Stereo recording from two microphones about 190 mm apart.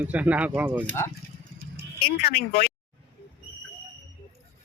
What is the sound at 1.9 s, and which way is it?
Speech, 55° left (ahead or behind).